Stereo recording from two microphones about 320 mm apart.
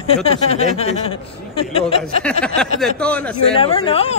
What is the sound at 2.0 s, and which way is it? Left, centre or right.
A man's voice, centre.